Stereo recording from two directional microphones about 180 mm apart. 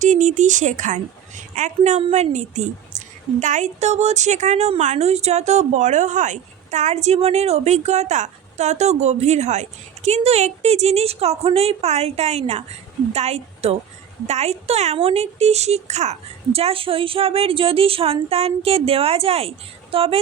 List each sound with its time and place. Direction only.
0.0 s a woman's voice: 40° right (ahead or behind)